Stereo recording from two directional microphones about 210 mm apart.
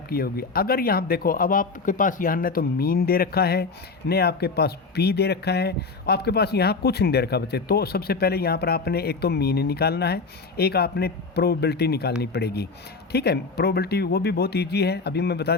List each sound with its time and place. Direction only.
0.1 s speech: 45° left (ahead or behind)